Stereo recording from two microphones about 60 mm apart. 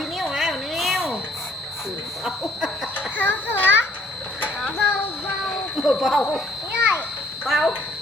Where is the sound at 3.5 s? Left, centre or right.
Left.